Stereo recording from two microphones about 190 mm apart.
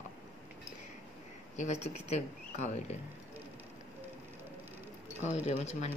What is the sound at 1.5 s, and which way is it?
Speech, 35° left (ahead or behind).